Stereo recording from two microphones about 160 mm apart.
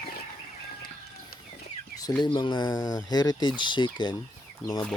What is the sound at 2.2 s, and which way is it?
Speech, 30° left (ahead or behind).